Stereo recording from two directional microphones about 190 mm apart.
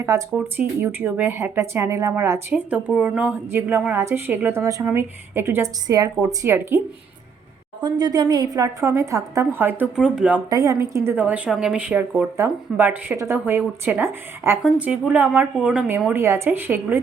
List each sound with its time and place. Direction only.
0.0 s speech: 15° right (ahead or behind)
7.8 s speech: 20° right (ahead or behind); by 10.4 s 5° right (ahead or behind)
10.5 s speech: 15° right (ahead or behind)
16.1 s speech: 15° right (ahead or behind)